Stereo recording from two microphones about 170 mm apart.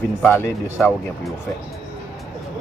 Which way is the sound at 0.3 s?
15° left (ahead or behind).